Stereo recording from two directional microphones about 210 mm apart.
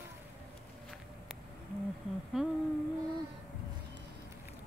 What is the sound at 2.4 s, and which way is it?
Humming, 5° right (ahead or behind).